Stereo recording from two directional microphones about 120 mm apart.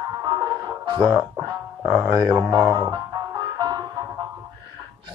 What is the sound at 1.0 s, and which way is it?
Speech, 10° right (ahead or behind).